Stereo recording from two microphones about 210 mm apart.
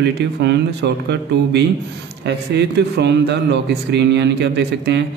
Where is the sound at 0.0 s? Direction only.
55° right (ahead or behind).